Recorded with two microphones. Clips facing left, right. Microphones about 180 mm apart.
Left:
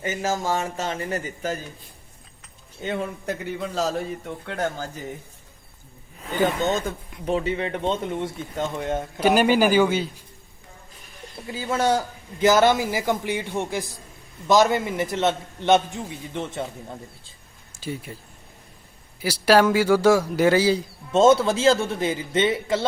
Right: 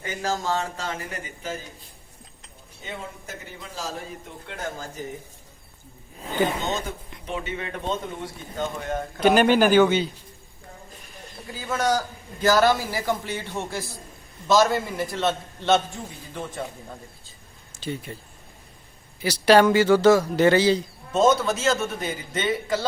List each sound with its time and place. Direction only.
0.1 s a man's voice: 20° left (ahead or behind)
1.1 s speech: 45° left (ahead or behind)
2.8 s a man's voice: 65° left (ahead or behind)
7.3 s a man's voice: 30° left (ahead or behind)
9.2 s speech: 5° left (ahead or behind)
11.5 s a man's voice: 30° left (ahead or behind)
17.7 s speech: 5° left (ahead or behind)
19.2 s speech: 5° left (ahead or behind)
21.1 s a man's voice: 25° left (ahead or behind)